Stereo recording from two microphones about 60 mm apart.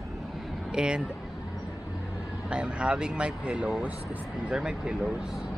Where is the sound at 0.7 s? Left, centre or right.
Centre.